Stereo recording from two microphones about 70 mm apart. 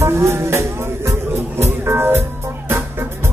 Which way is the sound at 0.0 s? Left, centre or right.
Right.